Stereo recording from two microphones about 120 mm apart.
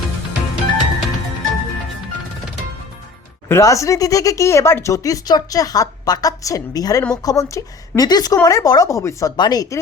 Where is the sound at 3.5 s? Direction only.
25° left (ahead or behind).